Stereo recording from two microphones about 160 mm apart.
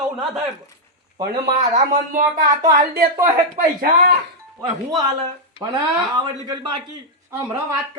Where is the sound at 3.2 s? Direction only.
60° right (ahead or behind).